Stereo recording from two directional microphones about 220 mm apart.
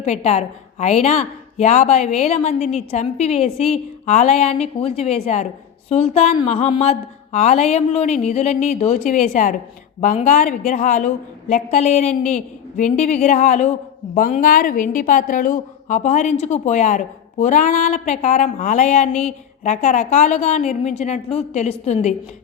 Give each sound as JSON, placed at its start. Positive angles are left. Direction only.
{"t": 0.0, "sound": "a woman's voice", "side_deg": 30}